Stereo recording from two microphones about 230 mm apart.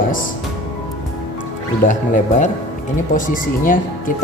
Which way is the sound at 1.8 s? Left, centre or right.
Left.